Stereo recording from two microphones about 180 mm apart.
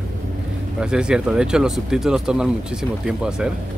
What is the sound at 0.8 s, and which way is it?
Speech, 5° right (ahead or behind).